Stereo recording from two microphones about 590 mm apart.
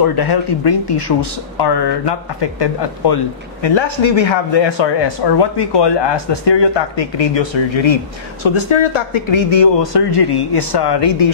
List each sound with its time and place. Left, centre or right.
0.0 s speech: left